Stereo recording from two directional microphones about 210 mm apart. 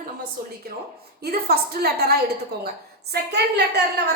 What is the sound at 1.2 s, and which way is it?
A woman's voice, 45° right (ahead or behind).